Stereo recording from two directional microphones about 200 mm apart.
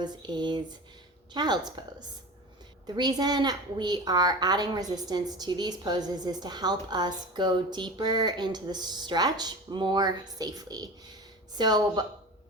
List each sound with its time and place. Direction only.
0.0 s a woman's voice: 20° right (ahead or behind)